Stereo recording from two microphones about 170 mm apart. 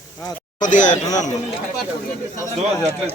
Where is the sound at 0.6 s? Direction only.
45° left (ahead or behind).